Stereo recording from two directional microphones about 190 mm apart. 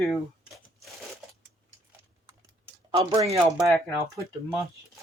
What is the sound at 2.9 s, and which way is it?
Speech, 30° right (ahead or behind).